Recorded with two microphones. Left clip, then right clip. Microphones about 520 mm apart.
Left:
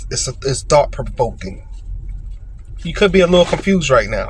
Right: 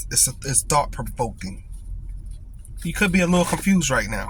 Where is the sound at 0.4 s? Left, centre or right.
Right.